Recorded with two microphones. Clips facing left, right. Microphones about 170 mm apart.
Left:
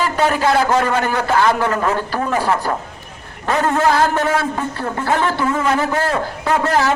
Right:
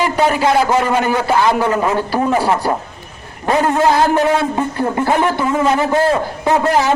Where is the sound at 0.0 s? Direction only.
15° right (ahead or behind).